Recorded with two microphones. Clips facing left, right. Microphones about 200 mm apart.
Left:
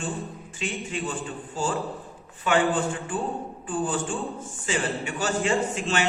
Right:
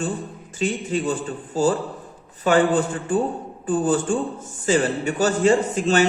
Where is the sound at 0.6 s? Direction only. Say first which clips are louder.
Right 8 dB; 40° right (ahead or behind).